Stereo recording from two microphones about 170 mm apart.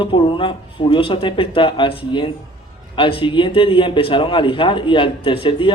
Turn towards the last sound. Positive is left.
turn(degrees=30)  # may be behind; listen again after turning